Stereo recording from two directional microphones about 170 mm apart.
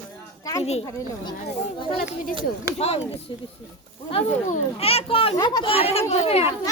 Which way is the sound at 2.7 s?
35° left (ahead or behind).